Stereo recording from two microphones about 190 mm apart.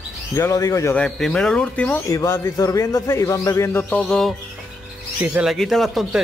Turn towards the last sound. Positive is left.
turn(degrees=0)  # may be behind; listen again after turning